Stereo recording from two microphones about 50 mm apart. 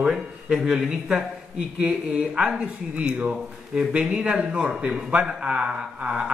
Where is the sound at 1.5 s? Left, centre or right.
Right.